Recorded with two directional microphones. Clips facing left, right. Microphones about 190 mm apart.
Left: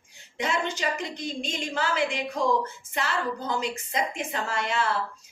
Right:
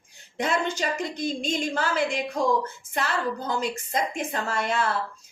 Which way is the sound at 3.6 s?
45° right (ahead or behind).